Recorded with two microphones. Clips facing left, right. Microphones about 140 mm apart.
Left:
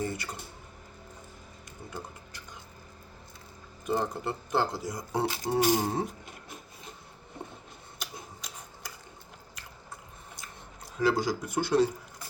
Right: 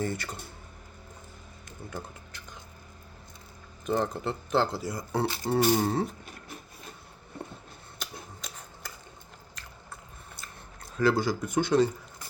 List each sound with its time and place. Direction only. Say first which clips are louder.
0.0 s speech: right 2 dB; 10° left (ahead or behind)
1.8 s speech: right 2 dB; 15° left (ahead or behind)
3.8 s speech: right 2 dB; 15° left (ahead or behind)
7.9 s tick-tock: right 1 dB; 10° left (ahead or behind)
10.9 s speech: right 2 dB; 15° left (ahead or behind)